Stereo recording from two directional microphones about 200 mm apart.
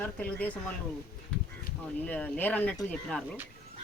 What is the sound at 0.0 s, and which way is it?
Speech, 5° left (ahead or behind).